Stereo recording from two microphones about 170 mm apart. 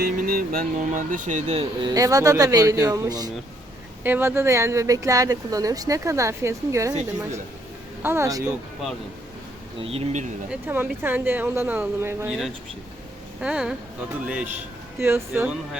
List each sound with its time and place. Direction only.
0.0 s speech: 60° right (ahead or behind); by 1.6 s 45° right (ahead or behind)
1.8 s speech: 20° right (ahead or behind)
8.0 s speech: 15° right (ahead or behind)
9.8 s speech: 35° right (ahead or behind)
10.5 s speech: 10° right (ahead or behind)
13.4 s speech: 5° right (ahead or behind)